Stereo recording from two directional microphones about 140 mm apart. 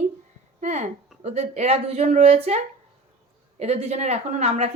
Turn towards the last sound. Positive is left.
turn(degrees=-55)  # may be behind; listen again after turning